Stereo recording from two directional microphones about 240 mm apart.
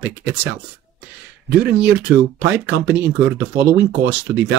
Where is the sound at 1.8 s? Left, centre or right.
Right.